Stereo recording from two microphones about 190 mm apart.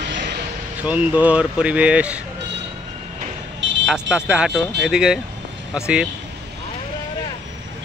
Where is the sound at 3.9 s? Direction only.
5° right (ahead or behind).